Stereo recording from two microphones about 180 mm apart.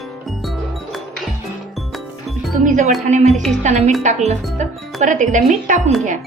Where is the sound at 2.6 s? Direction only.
45° right (ahead or behind).